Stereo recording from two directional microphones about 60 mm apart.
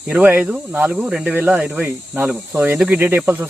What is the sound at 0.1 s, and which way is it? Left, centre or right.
Speech, right.